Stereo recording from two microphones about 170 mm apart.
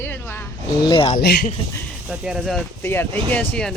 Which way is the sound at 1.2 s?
65° left (ahead or behind).